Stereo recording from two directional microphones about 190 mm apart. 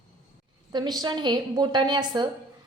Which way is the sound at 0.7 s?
20° right (ahead or behind).